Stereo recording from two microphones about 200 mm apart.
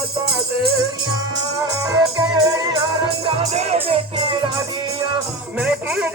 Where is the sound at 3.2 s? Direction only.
30° right (ahead or behind).